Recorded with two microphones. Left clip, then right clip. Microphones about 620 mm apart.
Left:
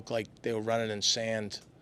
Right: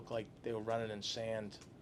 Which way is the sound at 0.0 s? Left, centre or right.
Left.